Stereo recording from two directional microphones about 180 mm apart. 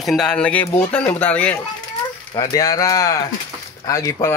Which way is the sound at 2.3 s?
20° left (ahead or behind).